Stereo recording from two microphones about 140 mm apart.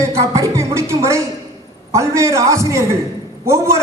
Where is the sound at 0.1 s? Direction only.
20° right (ahead or behind).